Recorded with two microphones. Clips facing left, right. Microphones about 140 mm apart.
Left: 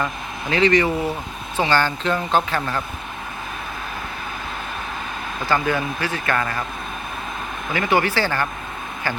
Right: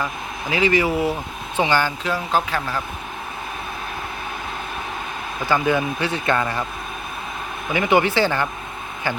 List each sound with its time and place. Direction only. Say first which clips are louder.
0.5 s speech: left 1 dB; 10° right (ahead or behind)
5.5 s speech: right 2 dB; 15° right (ahead or behind)
7.7 s speech: right 2 dB; 20° right (ahead or behind)